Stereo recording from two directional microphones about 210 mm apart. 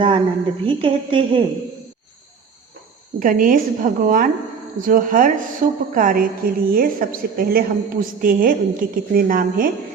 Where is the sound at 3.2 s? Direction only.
40° right (ahead or behind).